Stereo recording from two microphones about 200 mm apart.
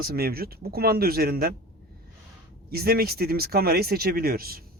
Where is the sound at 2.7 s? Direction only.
50° right (ahead or behind).